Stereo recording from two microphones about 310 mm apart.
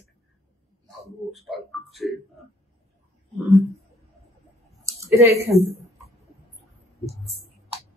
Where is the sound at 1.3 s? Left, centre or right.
Centre.